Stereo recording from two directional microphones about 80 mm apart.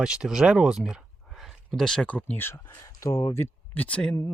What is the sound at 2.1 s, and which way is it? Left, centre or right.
Speech, centre.